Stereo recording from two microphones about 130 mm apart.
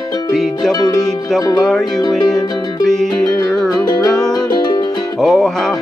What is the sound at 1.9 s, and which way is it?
Music, 30° left (ahead or behind).